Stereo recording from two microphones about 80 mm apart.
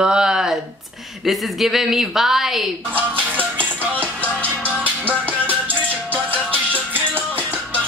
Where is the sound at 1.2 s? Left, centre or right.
Centre.